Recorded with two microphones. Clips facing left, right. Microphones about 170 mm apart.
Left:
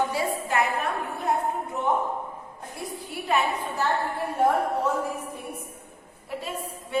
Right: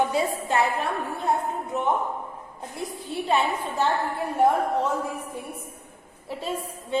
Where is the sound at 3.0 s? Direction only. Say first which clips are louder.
Right 2 dB; 25° right (ahead or behind).